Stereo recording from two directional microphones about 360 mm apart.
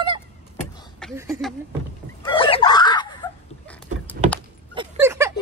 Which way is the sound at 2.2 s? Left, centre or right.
Centre.